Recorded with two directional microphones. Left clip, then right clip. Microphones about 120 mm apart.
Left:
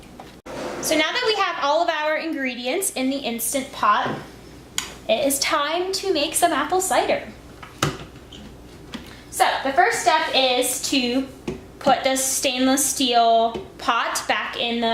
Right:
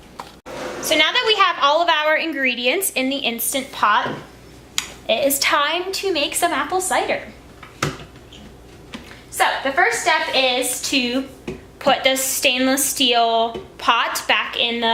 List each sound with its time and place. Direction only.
0.8 s a woman's voice: 15° right (ahead or behind)
7.8 s a sound: 5° left (ahead or behind)
9.4 s a woman's voice: 10° right (ahead or behind)